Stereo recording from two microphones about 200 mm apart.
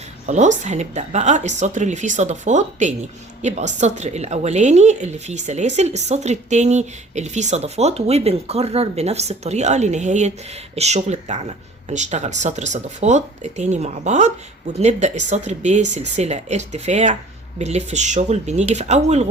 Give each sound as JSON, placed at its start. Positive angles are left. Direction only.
{"t": 0.3, "sound": "a woman's voice", "side_deg": -35}